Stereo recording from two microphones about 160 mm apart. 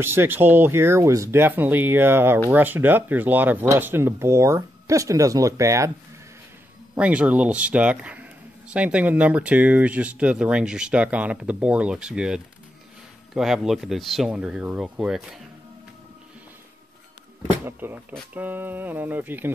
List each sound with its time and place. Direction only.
0.0 s a man's voice: 15° right (ahead or behind)
7.0 s a man's voice: 10° right (ahead or behind)
17.6 s a man's voice: 15° right (ahead or behind)